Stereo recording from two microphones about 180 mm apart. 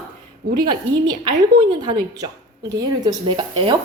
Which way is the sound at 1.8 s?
25° right (ahead or behind).